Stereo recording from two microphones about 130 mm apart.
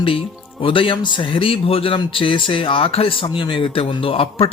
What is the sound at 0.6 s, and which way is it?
A man's voice, 40° left (ahead or behind).